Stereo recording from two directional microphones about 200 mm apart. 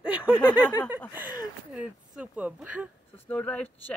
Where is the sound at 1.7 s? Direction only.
5° right (ahead or behind).